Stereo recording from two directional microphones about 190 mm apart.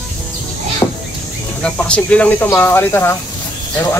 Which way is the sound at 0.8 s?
15° left (ahead or behind).